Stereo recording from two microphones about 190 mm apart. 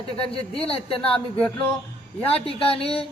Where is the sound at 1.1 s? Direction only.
5° left (ahead or behind).